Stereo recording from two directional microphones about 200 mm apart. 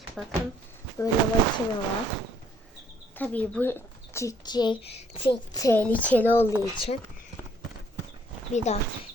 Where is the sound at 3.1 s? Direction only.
5° left (ahead or behind).